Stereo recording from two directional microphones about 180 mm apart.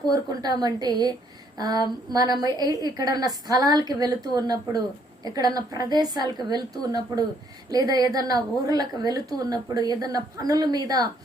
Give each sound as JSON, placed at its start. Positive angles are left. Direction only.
{"t": 0.1, "sound": "a woman's voice", "side_deg": -20}